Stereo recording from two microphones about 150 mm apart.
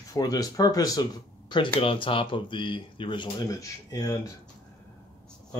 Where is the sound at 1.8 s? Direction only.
35° left (ahead or behind).